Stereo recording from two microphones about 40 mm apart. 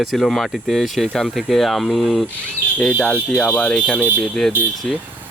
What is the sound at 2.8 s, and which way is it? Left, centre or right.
Speech, left.